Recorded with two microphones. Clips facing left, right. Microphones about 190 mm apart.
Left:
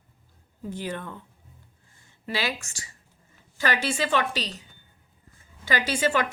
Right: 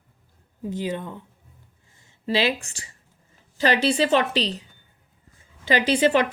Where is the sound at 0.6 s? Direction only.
20° right (ahead or behind).